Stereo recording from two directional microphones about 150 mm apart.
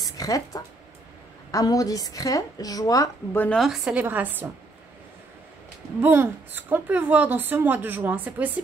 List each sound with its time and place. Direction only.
0.0 s a woman's voice: 25° left (ahead or behind)
3.3 s a woman's voice: 5° left (ahead or behind); by 4.5 s 10° right (ahead or behind)
5.9 s a woman's voice: 15° right (ahead or behind)